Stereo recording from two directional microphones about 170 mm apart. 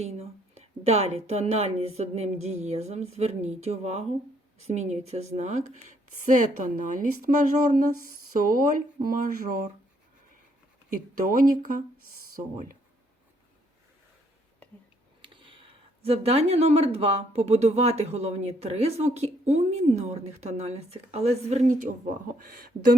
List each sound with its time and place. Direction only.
0.0 s a woman's voice: 40° right (ahead or behind)
10.8 s a woman's voice: 50° right (ahead or behind)
15.2 s speech: 30° right (ahead or behind)